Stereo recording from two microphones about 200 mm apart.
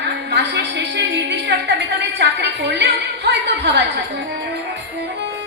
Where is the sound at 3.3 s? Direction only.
60° right (ahead or behind).